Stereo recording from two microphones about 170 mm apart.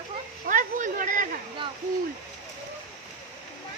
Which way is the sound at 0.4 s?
50° right (ahead or behind).